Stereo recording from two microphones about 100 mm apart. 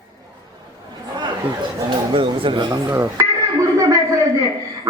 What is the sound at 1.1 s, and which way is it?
Chatter, 50° right (ahead or behind).